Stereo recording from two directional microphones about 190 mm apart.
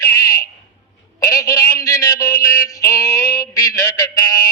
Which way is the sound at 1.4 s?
15° left (ahead or behind).